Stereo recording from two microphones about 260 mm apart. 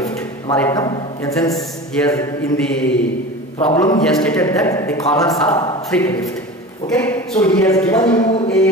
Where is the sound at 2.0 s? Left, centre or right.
Centre.